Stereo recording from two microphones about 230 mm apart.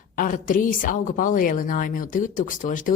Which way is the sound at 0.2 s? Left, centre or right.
Left.